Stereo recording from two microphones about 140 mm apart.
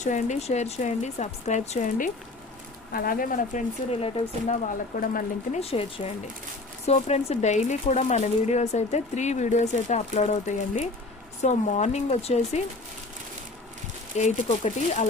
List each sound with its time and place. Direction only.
0.0 s speech: 60° left (ahead or behind)
2.9 s speech: 90° left
3.9 s speech: 50° left (ahead or behind); by 5.5 s 65° left (ahead or behind)
5.5 s speech: 45° left (ahead or behind)
14.2 s speech: 55° left (ahead or behind)